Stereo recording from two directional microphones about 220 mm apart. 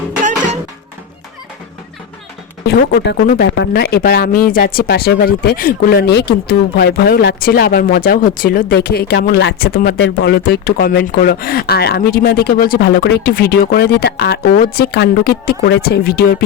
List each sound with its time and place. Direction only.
0.2 s music: 35° right (ahead or behind)
2.6 s speech: 50° left (ahead or behind)